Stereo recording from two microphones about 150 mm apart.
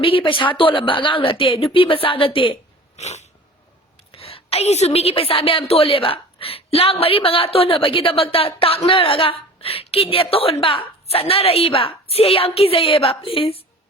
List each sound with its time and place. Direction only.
0.0 s a woman's voice: 35° left (ahead or behind)
3.0 s dog: 50° left (ahead or behind)
4.1 s a woman's voice: 40° left (ahead or behind)